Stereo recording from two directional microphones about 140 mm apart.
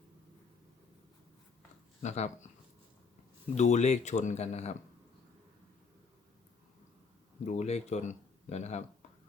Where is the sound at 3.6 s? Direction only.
55° left (ahead or behind).